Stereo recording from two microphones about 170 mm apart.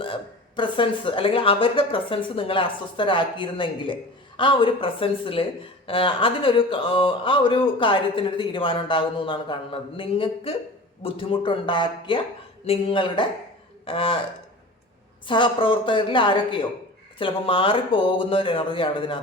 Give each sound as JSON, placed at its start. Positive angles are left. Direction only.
{"t": 0.0, "sound": "speech", "side_deg": 30}
{"t": 15.3, "sound": "a woman's voice", "side_deg": 30}